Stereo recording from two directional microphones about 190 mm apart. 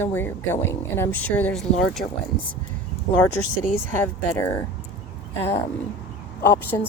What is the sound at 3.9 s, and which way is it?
Speech, 10° left (ahead or behind).